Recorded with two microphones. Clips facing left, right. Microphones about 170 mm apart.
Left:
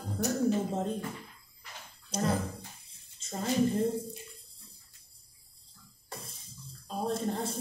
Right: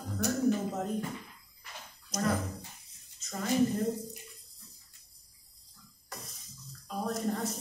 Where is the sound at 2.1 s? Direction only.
30° left (ahead or behind).